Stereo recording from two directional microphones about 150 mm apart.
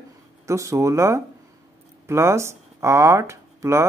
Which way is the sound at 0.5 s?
20° right (ahead or behind).